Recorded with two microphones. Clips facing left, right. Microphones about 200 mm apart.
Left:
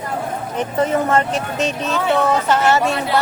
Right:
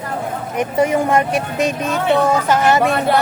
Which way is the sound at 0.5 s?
15° right (ahead or behind).